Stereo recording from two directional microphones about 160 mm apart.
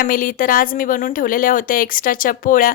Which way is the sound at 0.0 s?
60° left (ahead or behind).